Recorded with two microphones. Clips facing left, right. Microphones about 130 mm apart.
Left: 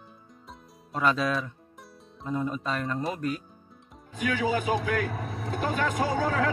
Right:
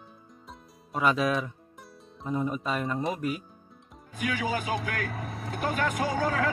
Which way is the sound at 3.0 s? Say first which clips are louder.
Even; 5° right (ahead or behind).